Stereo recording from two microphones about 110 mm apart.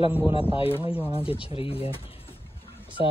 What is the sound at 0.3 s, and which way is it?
Speech, 55° left (ahead or behind).